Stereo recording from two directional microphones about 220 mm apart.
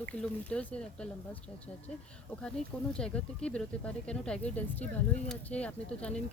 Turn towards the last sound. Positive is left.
turn(degrees=5)  # may be behind; listen again after turning